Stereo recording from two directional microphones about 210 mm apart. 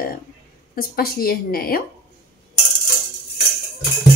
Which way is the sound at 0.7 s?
45° left (ahead or behind).